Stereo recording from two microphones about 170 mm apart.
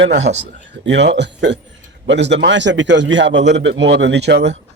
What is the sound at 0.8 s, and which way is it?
Speech, 90° right.